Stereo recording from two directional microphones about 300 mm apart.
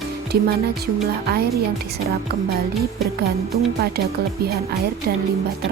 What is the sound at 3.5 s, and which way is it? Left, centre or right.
Speech, right.